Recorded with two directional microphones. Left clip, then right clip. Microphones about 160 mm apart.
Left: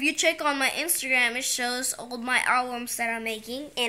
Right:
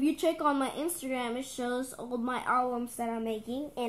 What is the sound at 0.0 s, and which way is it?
Speech, 30° left (ahead or behind).